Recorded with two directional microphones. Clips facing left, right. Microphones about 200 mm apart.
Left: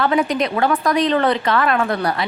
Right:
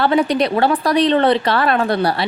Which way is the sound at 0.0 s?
35° right (ahead or behind).